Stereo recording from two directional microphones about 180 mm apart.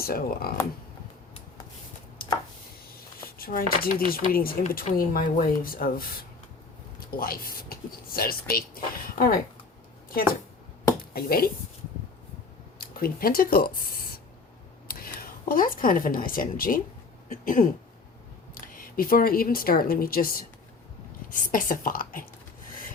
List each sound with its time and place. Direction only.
0.0 s speech: 55° left (ahead or behind)
2.2 s chopping: 55° left (ahead or behind)
3.2 s speech: 55° left (ahead or behind)
7.1 s speech: 55° left (ahead or behind)
11.1 s speech: 55° left (ahead or behind)
12.8 s speech: 55° left (ahead or behind)
18.7 s speech: 50° left (ahead or behind)
21.4 s speech: 50° left (ahead or behind)